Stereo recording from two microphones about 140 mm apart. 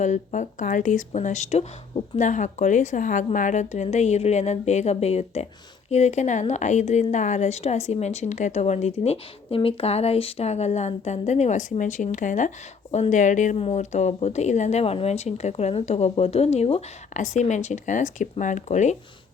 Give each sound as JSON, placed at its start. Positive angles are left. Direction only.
{"t": 0.0, "sound": "speech", "side_deg": 60}